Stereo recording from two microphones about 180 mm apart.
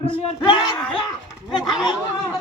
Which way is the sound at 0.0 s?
30° left (ahead or behind).